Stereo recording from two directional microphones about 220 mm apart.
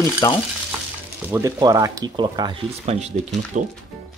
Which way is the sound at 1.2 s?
10° right (ahead or behind).